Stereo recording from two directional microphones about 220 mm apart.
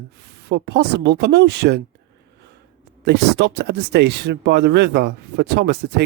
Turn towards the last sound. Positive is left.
turn(degrees=-50)  # may be behind; listen again after turning